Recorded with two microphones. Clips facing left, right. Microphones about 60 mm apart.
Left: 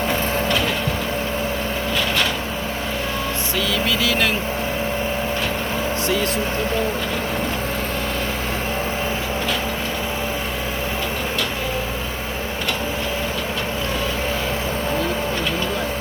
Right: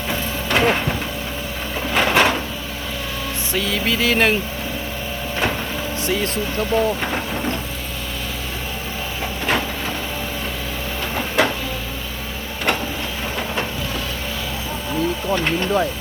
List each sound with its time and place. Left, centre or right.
0.5 s vehicle: right
2.0 s a sound: right
3.5 s speech: right
6.1 s speech: right